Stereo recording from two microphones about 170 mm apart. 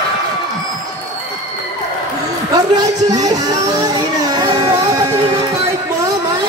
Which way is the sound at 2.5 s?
20° right (ahead or behind).